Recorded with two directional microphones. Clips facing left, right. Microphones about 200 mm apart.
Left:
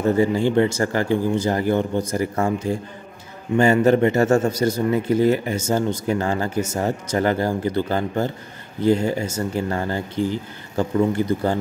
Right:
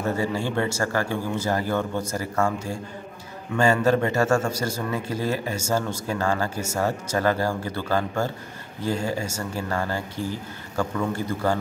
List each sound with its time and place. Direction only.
0.1 s speech: 20° left (ahead or behind)